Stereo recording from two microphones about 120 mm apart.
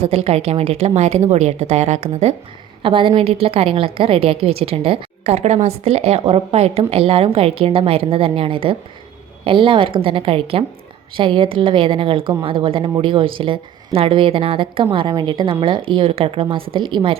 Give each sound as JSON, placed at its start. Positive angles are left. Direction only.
{"t": 0.0, "sound": "speech", "side_deg": -60}
{"t": 2.8, "sound": "a woman's voice", "side_deg": -45}
{"t": 5.3, "sound": "a woman's voice", "side_deg": -70}
{"t": 14.9, "sound": "a woman's voice", "side_deg": -40}